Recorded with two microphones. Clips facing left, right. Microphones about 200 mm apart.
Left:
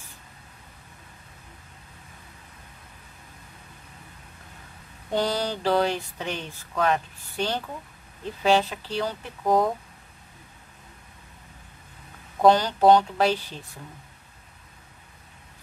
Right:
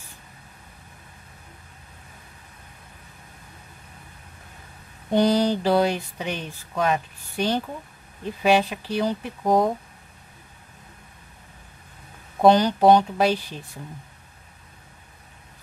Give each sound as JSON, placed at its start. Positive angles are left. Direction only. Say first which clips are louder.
{"t": 5.1, "sound": "speech", "louder": "right 7 dB", "side_deg": -15}
{"t": 12.4, "sound": "speech", "louder": "right 2 dB", "side_deg": -15}